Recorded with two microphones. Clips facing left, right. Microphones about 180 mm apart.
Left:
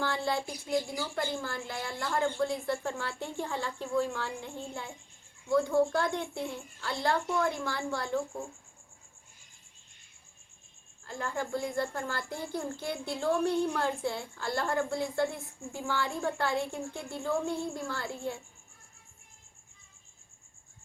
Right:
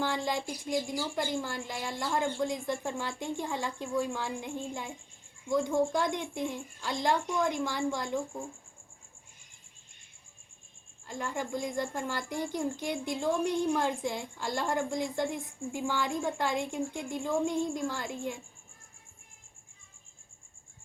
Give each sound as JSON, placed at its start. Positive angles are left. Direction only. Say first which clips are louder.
{"t": 0.0, "sound": "a woman's voice", "louder": "even", "side_deg": -15}
{"t": 11.0, "sound": "a woman's voice", "louder": "even", "side_deg": -15}